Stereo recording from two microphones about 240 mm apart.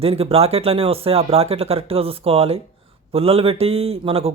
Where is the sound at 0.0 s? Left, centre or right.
Right.